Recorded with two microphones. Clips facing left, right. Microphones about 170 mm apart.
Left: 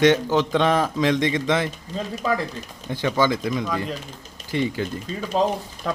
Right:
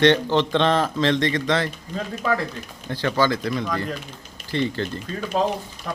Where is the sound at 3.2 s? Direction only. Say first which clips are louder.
Even; 15° left (ahead or behind).